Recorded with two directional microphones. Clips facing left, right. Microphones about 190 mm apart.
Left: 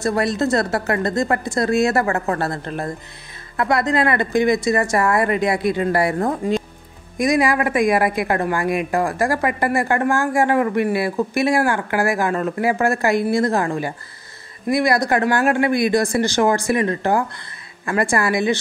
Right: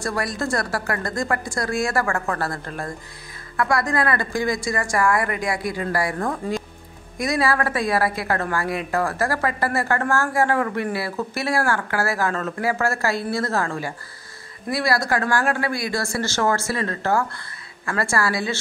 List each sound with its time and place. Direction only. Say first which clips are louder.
0.0 s a woman's voice: left 6 dB; 25° left (ahead or behind)